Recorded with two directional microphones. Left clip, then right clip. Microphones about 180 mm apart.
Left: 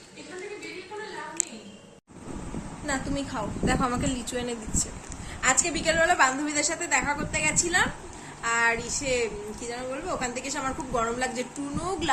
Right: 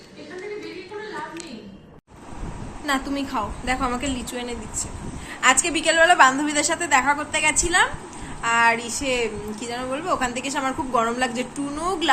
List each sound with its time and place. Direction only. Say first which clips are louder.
2.8 s a woman's voice: right 6 dB; centre (ahead or behind)
3.7 s a woman's voice: right 1 dB; 45° left (ahead or behind)
5.4 s a woman's voice: right 6 dB; centre (ahead or behind)